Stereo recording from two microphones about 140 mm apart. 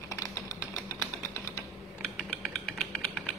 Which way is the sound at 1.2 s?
20° left (ahead or behind).